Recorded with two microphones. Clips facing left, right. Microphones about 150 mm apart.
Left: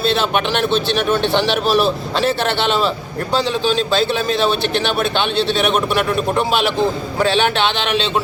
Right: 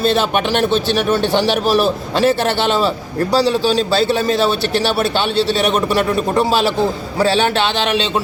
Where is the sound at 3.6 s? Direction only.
40° right (ahead or behind).